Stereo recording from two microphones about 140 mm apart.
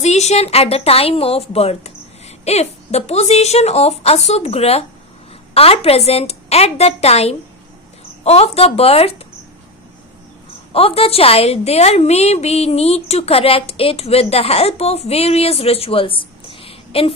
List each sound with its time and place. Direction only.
0.0 s a woman's voice: 50° left (ahead or behind)
10.7 s a woman's voice: 45° left (ahead or behind)